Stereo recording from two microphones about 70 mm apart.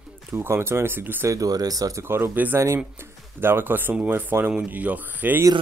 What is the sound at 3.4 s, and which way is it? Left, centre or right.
Speech, right.